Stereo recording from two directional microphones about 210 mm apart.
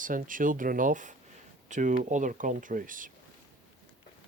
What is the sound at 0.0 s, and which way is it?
Speech, 40° right (ahead or behind).